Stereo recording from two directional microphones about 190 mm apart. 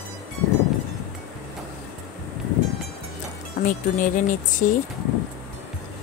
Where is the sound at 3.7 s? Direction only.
45° left (ahead or behind).